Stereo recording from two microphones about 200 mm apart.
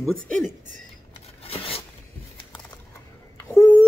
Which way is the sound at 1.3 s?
30° left (ahead or behind).